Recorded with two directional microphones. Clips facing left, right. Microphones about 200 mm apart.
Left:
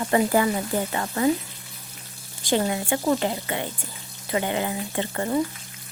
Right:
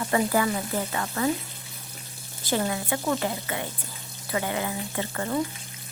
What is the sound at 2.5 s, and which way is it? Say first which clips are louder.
Speech: left 3 dB; 25° left (ahead or behind).